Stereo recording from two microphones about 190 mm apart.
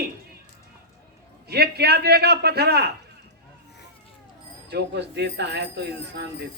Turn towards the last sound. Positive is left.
turn(degrees=-65)  # may be behind; listen again after turning